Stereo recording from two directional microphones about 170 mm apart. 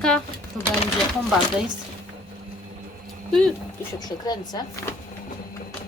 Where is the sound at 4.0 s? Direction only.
25° left (ahead or behind).